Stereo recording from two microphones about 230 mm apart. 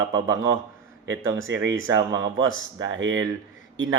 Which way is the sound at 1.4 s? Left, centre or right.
Right.